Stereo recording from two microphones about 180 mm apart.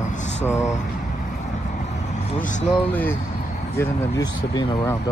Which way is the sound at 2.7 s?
10° left (ahead or behind).